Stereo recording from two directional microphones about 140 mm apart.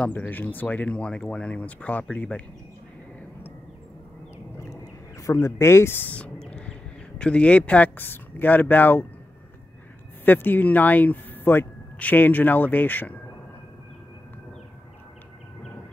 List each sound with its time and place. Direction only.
0.0 s speech: 15° left (ahead or behind)
4.6 s a sound: 20° left (ahead or behind)
7.2 s speech: 5° left (ahead or behind)
10.2 s speech: 15° left (ahead or behind)